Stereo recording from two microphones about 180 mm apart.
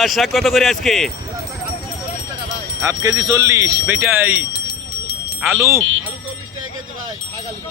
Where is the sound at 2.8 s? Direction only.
15° right (ahead or behind).